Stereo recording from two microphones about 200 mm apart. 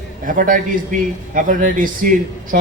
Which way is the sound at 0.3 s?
40° right (ahead or behind).